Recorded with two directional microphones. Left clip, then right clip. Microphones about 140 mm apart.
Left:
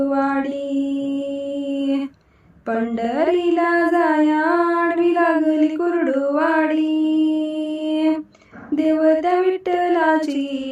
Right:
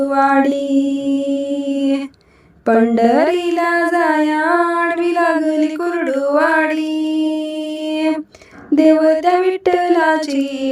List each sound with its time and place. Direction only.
0.0 s mantra: 50° right (ahead or behind)
2.6 s a sound: 50° right (ahead or behind)
8.7 s female singing: 50° right (ahead or behind)